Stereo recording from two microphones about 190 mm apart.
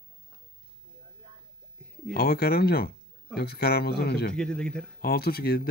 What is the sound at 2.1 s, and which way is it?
Speech, 55° left (ahead or behind).